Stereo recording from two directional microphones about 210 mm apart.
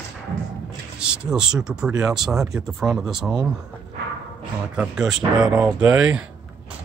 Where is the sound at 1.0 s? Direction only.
5° right (ahead or behind).